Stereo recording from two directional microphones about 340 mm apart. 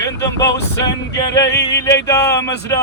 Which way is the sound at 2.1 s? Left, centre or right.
Centre.